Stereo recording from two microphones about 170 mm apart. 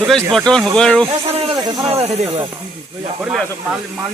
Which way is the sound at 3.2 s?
5° right (ahead or behind).